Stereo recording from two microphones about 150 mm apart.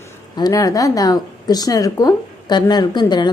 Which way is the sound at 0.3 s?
25° left (ahead or behind).